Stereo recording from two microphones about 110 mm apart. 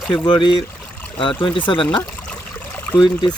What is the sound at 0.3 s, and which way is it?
Speech, 45° left (ahead or behind).